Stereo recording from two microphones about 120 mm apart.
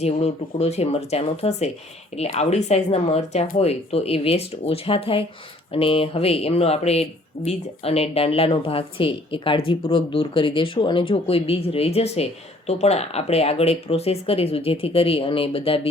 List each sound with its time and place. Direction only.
0.0 s speech: 65° left (ahead or behind)